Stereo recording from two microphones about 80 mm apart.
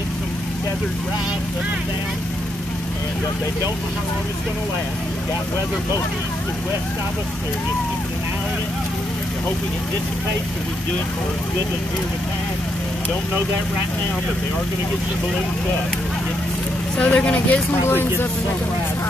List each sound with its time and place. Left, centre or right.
16.9 s speech: centre